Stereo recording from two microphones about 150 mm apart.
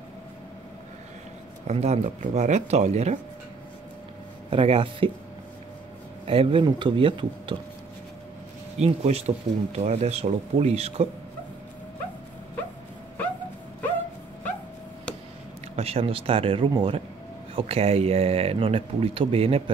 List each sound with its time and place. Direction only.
1.7 s speech: 45° right (ahead or behind)
4.5 s speech: 40° right (ahead or behind)
6.2 s speech: 40° right (ahead or behind)
8.7 s speech: 45° right (ahead or behind)
15.7 s speech: 40° right (ahead or behind)